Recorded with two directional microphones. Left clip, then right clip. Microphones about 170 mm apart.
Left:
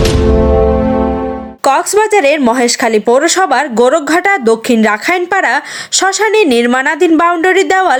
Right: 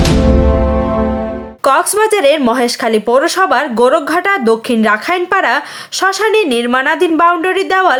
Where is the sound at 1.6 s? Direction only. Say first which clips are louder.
Left 1 dB; 20° left (ahead or behind).